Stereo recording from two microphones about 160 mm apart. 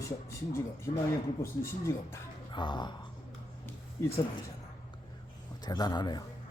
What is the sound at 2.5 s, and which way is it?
Speech, 30° left (ahead or behind).